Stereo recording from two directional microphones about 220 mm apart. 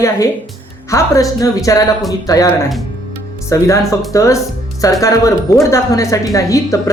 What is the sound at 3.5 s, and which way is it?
Speech, 15° left (ahead or behind).